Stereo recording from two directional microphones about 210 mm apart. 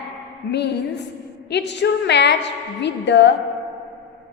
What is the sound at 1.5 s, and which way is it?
A woman's voice, 55° left (ahead or behind).